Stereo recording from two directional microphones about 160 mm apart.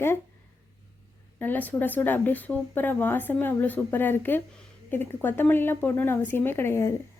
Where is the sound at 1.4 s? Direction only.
10° left (ahead or behind).